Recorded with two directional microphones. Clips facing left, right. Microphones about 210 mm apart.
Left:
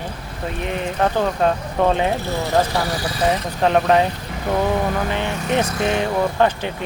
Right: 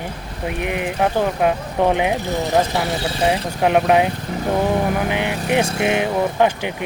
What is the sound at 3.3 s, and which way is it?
Speech, 10° right (ahead or behind).